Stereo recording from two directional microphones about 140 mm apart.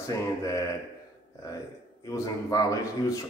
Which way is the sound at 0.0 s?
25° left (ahead or behind).